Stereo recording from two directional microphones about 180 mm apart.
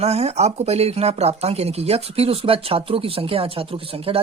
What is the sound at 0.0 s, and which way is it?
Speech, 35° right (ahead or behind).